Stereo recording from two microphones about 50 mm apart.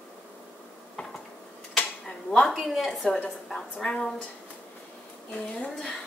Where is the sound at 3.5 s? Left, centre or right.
Centre.